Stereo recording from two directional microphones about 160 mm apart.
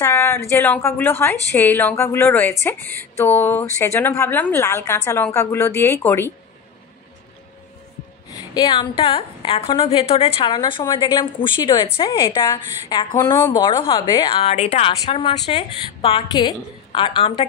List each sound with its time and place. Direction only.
0.0 s a woman's voice: 15° left (ahead or behind)
8.3 s a woman's voice: 25° left (ahead or behind)
13.1 s a woman's voice: 20° left (ahead or behind)